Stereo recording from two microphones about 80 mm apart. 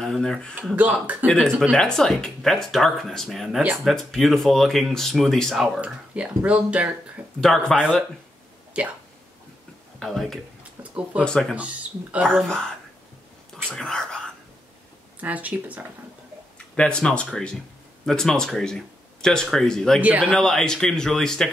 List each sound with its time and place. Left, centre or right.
0.0 s speech: centre
5.8 s speech: centre
7.3 s speech: centre
8.8 s speech: centre
9.9 s speech: centre
10.8 s a sound: centre
11.2 s speech: centre
11.5 s speech: centre
12.3 s speech: centre
13.7 s whispering: centre
15.1 s speech: centre
16.5 s speech: centre
20.0 s speech: centre
20.3 s speech: centre